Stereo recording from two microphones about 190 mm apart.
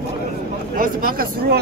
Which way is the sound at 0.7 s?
50° right (ahead or behind).